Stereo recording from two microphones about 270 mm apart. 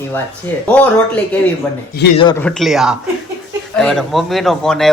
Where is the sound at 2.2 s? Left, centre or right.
Centre.